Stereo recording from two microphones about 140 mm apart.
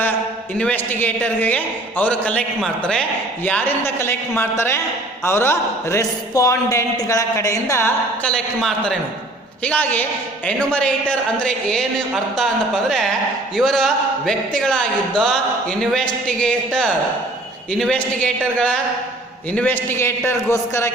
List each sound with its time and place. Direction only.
0.5 s a man's voice: 10° left (ahead or behind)
8.2 s a man's voice: 5° left (ahead or behind)